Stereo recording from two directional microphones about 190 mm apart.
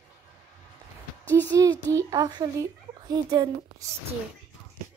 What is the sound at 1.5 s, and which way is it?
A child's voice, 20° right (ahead or behind).